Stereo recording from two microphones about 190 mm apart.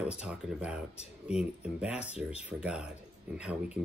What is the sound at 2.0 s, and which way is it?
Speech, 35° left (ahead or behind).